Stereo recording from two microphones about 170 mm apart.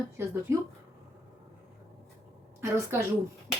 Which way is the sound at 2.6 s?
15° right (ahead or behind).